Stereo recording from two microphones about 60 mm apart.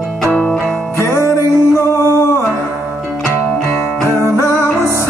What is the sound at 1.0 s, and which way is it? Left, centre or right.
Music, left.